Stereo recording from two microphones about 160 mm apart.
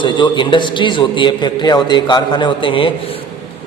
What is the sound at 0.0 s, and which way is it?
A man's voice, 30° left (ahead or behind).